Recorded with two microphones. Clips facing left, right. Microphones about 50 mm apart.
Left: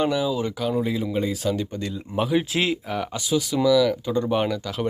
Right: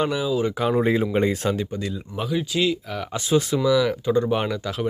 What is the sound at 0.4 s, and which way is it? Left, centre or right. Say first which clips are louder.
Speech: right 4 dB; right.